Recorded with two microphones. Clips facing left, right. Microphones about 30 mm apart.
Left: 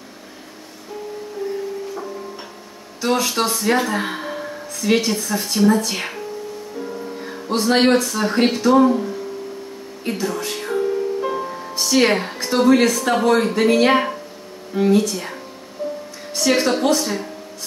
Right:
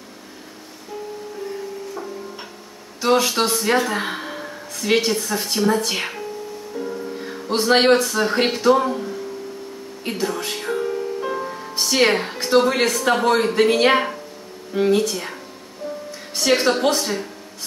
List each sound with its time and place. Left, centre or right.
3.0 s a man's voice: centre
6.8 s music: centre
7.6 s a man's voice: centre
10.0 s music: centre
11.8 s music: centre
12.1 s a woman's voice: centre
12.4 s a man's voice: centre
16.3 s a woman's voice: centre